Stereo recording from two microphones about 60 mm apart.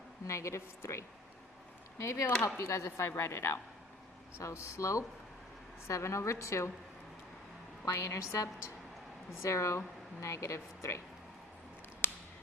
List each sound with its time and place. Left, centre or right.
0.3 s a woman's voice: left
7.9 s speech: left
12.0 s a sound: left